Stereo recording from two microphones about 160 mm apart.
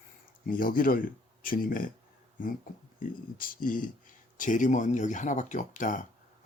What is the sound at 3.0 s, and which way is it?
Speech, 60° left (ahead or behind).